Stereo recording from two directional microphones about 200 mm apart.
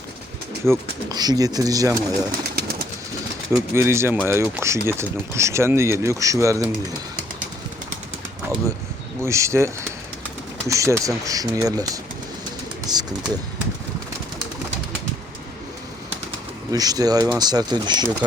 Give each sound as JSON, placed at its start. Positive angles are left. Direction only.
{"t": 0.6, "sound": "speech", "side_deg": -15}
{"t": 2.0, "sound": "pigeon", "side_deg": -50}
{"t": 3.8, "sound": "speech", "side_deg": -15}
{"t": 9.2, "sound": "speech", "side_deg": -15}
{"t": 12.9, "sound": "speech", "side_deg": -20}
{"t": 16.7, "sound": "speech", "side_deg": -20}